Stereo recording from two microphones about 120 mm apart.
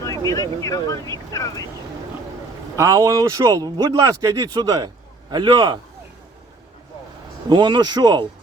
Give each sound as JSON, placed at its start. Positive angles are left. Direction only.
{"t": 0.3, "sound": "speech", "side_deg": 30}
{"t": 2.7, "sound": "speech", "side_deg": -25}
{"t": 7.5, "sound": "speech", "side_deg": -40}